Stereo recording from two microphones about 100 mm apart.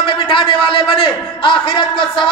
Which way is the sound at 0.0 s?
55° left (ahead or behind).